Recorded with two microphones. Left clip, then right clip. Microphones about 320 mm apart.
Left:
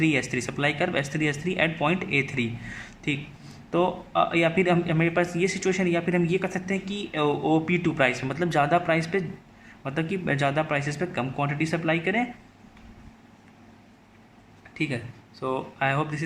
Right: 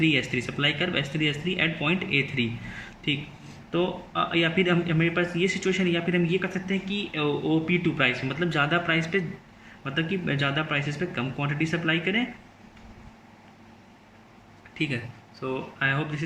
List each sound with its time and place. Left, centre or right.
0.0 s a man's voice: centre
7.3 s speech: left
7.6 s a man's voice: centre
14.8 s a man's voice: centre